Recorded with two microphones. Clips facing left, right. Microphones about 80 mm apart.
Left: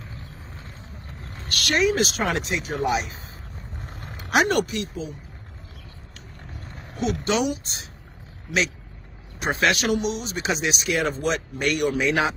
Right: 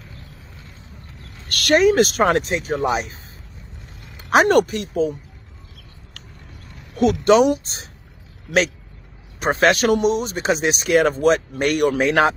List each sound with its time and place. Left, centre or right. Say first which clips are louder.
1.2 s a sound: left 3 dB; left
1.5 s speech: right 7 dB; right
3.8 s a sound: left 6 dB; left
4.3 s speech: right 6 dB; right
7.2 s speech: right 11 dB; right
9.4 s speech: right 6 dB; right